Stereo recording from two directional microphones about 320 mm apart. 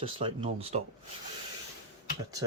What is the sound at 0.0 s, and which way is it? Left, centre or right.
Speech, centre.